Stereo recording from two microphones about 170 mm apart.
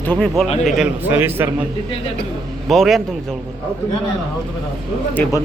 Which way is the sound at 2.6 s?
Centre (ahead or behind).